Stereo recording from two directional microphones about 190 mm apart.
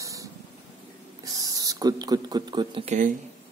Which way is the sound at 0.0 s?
15° right (ahead or behind).